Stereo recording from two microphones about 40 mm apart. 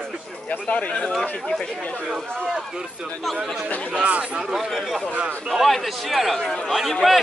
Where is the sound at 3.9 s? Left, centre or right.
Right.